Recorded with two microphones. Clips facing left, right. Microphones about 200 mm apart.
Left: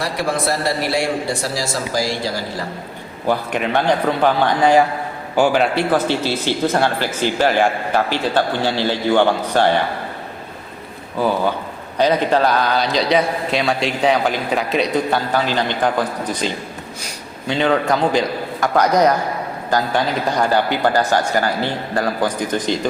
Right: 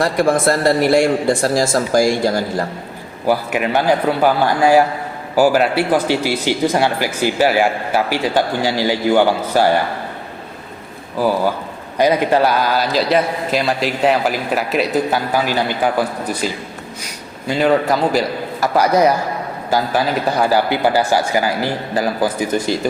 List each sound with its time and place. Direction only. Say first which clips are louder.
0.0 s speech: right 6 dB; 50° right (ahead or behind)
3.2 s speech: right 2 dB; 5° right (ahead or behind)
11.2 s a man's voice: right 2 dB; 5° right (ahead or behind)
17.5 s a man's voice: right 2 dB; 5° right (ahead or behind)